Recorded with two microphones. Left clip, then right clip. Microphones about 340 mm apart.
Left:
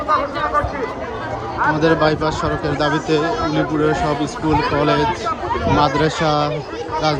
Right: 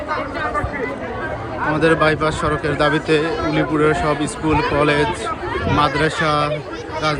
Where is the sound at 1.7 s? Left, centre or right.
Centre.